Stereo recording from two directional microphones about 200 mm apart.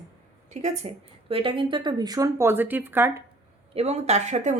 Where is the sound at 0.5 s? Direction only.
35° right (ahead or behind); by 3.2 s 10° right (ahead or behind).